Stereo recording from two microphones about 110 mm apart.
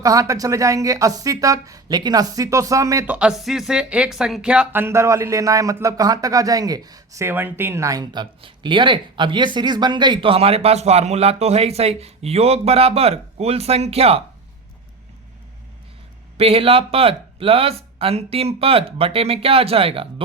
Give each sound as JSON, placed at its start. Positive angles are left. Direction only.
{"t": 0.0, "sound": "speech", "side_deg": -30}
{"t": 3.1, "sound": "speech", "side_deg": -10}
{"t": 16.4, "sound": "speech", "side_deg": -60}